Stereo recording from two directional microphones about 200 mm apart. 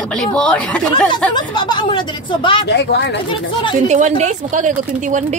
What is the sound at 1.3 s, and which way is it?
Speech, 20° left (ahead or behind).